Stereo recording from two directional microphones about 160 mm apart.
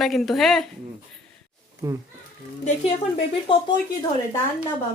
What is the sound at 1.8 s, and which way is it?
Speech, 20° right (ahead or behind).